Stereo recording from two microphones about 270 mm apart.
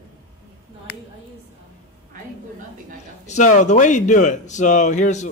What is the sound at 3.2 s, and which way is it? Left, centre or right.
Speech, left.